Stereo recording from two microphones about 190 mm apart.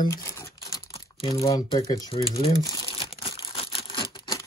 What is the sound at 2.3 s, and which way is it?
Crumpling, 20° left (ahead or behind).